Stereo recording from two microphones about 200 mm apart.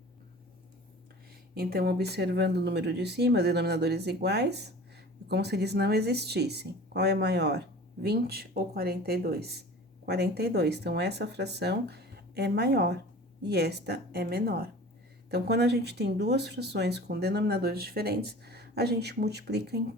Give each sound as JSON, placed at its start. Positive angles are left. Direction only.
{"t": 1.5, "sound": "speech", "side_deg": -55}